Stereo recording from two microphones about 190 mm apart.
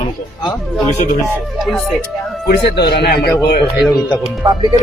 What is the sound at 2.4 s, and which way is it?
Speech, 60° left (ahead or behind).